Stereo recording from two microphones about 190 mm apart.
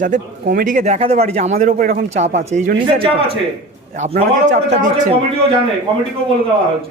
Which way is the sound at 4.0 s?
35° right (ahead or behind).